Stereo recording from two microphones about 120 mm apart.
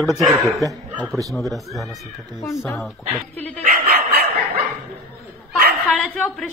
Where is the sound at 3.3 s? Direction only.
15° left (ahead or behind).